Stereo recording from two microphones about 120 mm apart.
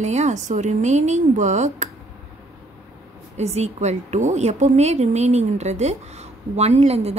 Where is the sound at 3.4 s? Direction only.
65° right (ahead or behind).